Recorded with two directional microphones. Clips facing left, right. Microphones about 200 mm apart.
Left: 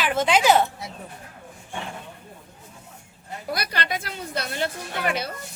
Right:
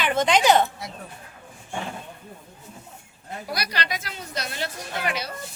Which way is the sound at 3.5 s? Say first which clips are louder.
Left 2 dB; 50° left (ahead or behind).